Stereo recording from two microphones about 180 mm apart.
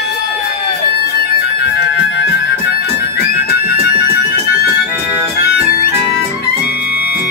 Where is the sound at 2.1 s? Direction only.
70° left (ahead or behind).